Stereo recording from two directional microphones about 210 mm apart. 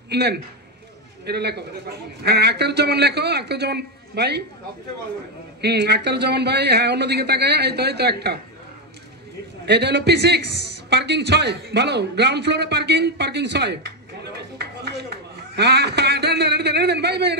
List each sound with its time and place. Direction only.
0.1 s a man's voice: 50° right (ahead or behind)
5.6 s a man's voice: 50° right (ahead or behind)
9.7 s a man's voice: 55° right (ahead or behind)
14.6 s a sound: 55° right (ahead or behind)
15.5 s a man's voice: 55° right (ahead or behind)